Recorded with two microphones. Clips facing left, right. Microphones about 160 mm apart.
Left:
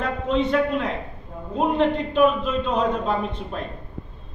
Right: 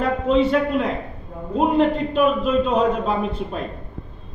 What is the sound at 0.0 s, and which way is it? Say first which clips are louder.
A man's voice: right 5 dB; 5° right (ahead or behind).